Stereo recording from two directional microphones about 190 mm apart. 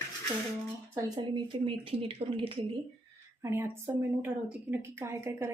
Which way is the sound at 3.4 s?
15° right (ahead or behind).